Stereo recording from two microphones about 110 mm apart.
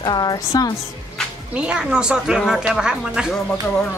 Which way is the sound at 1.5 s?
10° right (ahead or behind).